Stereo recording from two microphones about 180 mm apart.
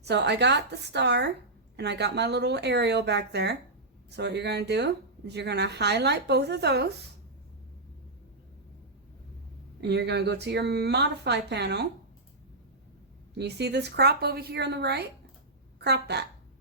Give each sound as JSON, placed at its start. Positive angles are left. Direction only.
{"t": 0.0, "sound": "speech", "side_deg": -70}
{"t": 9.8, "sound": "speech", "side_deg": -70}
{"t": 13.4, "sound": "speech", "side_deg": -70}